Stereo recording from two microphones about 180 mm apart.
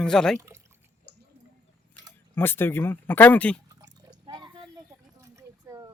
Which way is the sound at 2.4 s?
10° left (ahead or behind).